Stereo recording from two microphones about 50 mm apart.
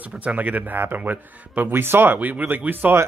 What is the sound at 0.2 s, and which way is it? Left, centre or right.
A man's voice, right.